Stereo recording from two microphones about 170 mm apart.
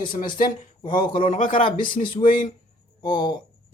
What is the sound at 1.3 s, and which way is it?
Speech, 50° left (ahead or behind).